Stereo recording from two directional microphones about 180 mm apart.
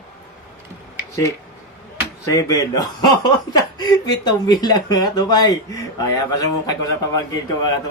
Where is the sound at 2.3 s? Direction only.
20° left (ahead or behind).